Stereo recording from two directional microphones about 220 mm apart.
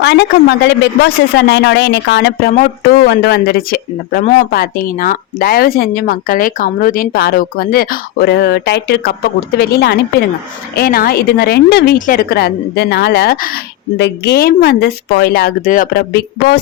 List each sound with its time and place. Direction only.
0.0 s speech: 50° left (ahead or behind)